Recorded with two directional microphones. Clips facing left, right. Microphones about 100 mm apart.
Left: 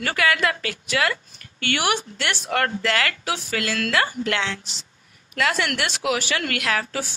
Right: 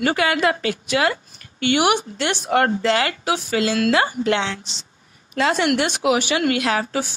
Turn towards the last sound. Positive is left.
turn(degrees=-20)  # may be behind; listen again after turning